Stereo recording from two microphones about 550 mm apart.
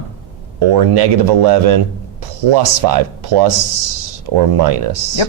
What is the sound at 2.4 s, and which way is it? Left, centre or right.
Speech, right.